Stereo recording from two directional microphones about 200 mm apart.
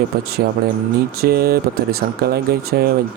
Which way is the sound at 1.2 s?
50° right (ahead or behind).